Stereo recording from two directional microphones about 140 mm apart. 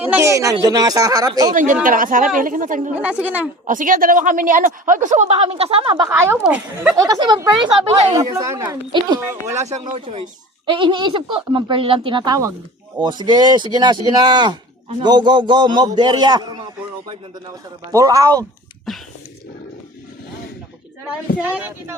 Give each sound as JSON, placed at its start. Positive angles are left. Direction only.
{"t": 0.0, "sound": "speech", "side_deg": -15}
{"t": 1.5, "sound": "a woman's voice", "side_deg": -75}
{"t": 2.9, "sound": "speech", "side_deg": -10}
{"t": 3.7, "sound": "a woman's voice", "side_deg": -70}
{"t": 6.1, "sound": "speech", "side_deg": -20}
{"t": 8.2, "sound": "speech", "side_deg": -25}
{"t": 9.2, "sound": "speech", "side_deg": -20}
{"t": 10.7, "sound": "speech", "side_deg": -35}
{"t": 16.0, "sound": "a sound", "side_deg": -30}
{"t": 17.9, "sound": "speech", "side_deg": -25}
{"t": 18.9, "sound": "a sound", "side_deg": 0}
{"t": 21.3, "sound": "speech", "side_deg": -10}